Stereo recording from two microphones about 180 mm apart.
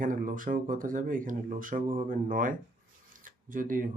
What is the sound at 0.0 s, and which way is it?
Speech, 45° right (ahead or behind).